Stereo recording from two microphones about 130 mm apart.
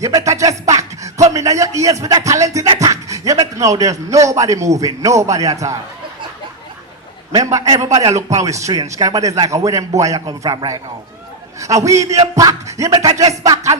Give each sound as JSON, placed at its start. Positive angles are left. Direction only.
{"t": 0.0, "sound": "music", "side_deg": -25}
{"t": 1.3, "sound": "a man's voice", "side_deg": -25}
{"t": 7.3, "sound": "a man's voice", "side_deg": -25}